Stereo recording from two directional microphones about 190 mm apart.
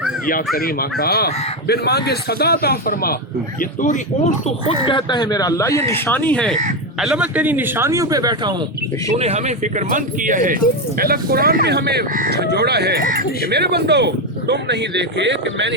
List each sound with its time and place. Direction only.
0.5 s speech: 50° left (ahead or behind); by 8.5 s 20° right (ahead or behind)
9.1 s speech: 35° right (ahead or behind); by 15.7 s 70° right (ahead or behind)